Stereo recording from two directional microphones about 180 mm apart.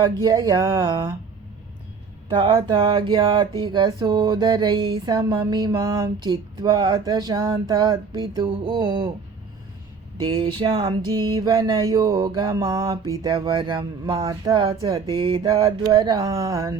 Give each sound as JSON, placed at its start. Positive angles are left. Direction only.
{"t": 0.0, "sound": "speech", "side_deg": -25}
{"t": 2.3, "sound": "speech", "side_deg": -30}
{"t": 10.2, "sound": "speech", "side_deg": -30}